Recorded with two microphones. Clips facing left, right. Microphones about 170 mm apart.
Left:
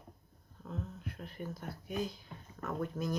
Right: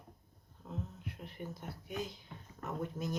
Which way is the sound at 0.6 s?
20° right (ahead or behind).